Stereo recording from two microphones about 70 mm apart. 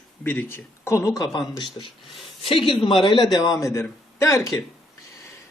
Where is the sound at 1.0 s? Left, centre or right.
Left.